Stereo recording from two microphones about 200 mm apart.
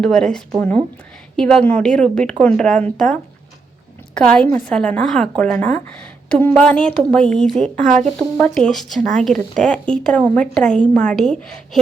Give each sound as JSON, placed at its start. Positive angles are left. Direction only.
{"t": 0.0, "sound": "a woman's voice", "side_deg": 5}
{"t": 7.6, "sound": "speech", "side_deg": -40}
{"t": 8.4, "sound": "a woman's voice", "side_deg": 5}